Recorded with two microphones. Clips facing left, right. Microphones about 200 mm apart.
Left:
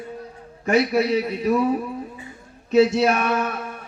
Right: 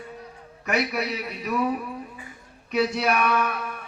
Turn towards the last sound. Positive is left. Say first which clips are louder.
# left 1 dB
turn(degrees=25)  # may be behind; listen again after turning